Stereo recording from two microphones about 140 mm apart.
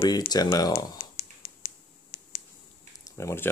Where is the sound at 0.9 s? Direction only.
45° left (ahead or behind).